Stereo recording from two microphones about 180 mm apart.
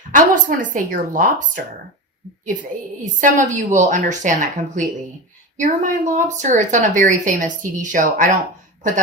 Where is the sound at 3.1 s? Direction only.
45° right (ahead or behind).